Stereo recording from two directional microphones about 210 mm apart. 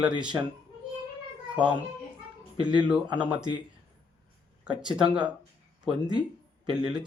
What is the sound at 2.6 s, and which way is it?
Speech, 5° right (ahead or behind).